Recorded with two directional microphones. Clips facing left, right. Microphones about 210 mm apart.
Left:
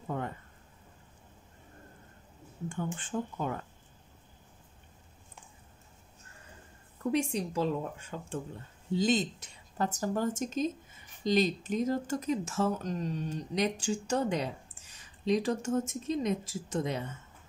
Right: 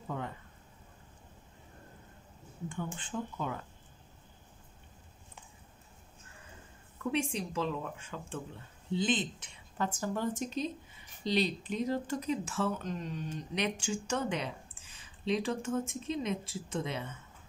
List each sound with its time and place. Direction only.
0.1 s a sound: 50° left (ahead or behind)
3.0 s speech: 45° left (ahead or behind)
7.0 s speech: 40° left (ahead or behind)